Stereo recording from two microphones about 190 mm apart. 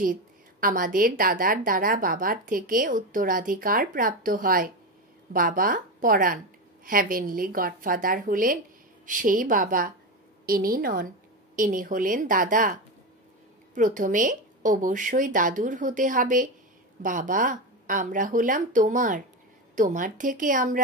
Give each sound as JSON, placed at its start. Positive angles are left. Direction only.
{"t": 0.0, "sound": "a woman's voice", "side_deg": -45}